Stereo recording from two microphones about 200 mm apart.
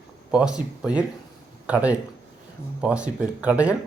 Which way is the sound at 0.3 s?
5° right (ahead or behind).